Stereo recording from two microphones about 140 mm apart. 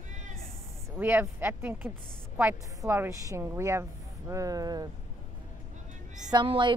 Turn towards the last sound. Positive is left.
turn(degrees=-35)  # may be behind; listen again after turning